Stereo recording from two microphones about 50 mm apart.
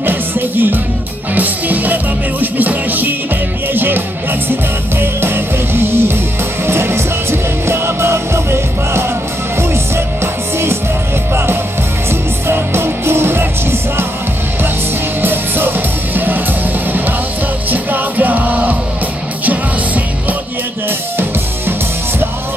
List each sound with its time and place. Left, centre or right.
0.0 s music: right
12.1 s music: right
15.2 s music: right
17.6 s music: right